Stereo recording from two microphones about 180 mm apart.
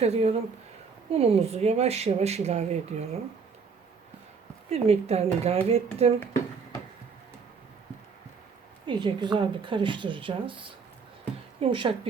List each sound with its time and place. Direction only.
0.0 s speech: 35° right (ahead or behind)
4.7 s speech: 35° right (ahead or behind)
8.9 s speech: 25° right (ahead or behind)